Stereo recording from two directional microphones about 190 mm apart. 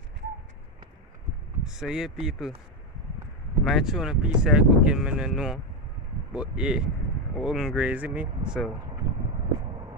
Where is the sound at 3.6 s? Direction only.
Centre (ahead or behind).